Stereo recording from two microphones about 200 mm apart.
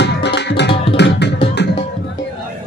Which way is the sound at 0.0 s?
55° left (ahead or behind).